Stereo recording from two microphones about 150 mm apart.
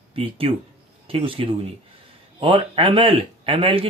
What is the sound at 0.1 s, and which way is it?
Speech, 40° right (ahead or behind).